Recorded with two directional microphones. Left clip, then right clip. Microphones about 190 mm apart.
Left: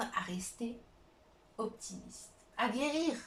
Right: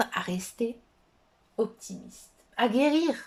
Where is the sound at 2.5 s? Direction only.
50° right (ahead or behind).